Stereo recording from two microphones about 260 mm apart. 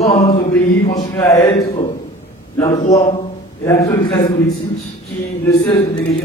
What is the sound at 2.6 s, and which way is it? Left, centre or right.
Speech, centre.